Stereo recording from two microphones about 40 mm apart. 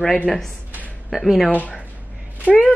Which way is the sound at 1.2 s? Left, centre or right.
Centre.